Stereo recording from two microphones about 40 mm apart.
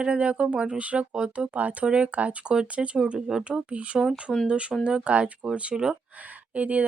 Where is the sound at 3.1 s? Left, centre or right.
Centre.